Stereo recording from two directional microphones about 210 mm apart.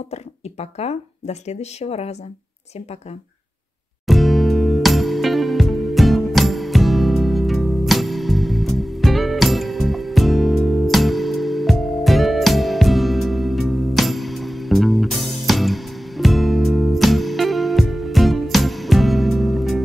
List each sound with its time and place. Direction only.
0.1 s speech: 30° left (ahead or behind)
4.1 s music: centre (ahead or behind)